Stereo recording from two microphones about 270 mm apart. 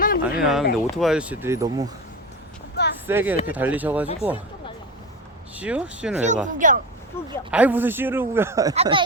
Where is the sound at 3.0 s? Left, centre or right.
Centre.